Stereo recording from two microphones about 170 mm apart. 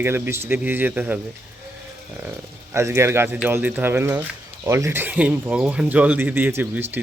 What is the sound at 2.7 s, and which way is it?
Speech, 15° right (ahead or behind).